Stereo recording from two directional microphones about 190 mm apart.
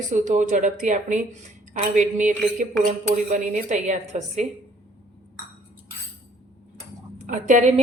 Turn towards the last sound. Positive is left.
turn(degrees=-35)  # may be behind; listen again after turning